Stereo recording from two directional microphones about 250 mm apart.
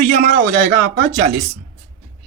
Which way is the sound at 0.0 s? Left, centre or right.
Right.